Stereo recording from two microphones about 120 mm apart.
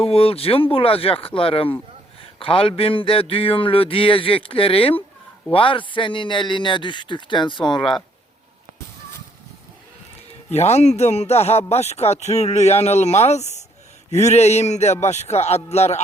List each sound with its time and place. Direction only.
0.0 s a man's voice: 50° left (ahead or behind)
10.5 s speech: 65° left (ahead or behind)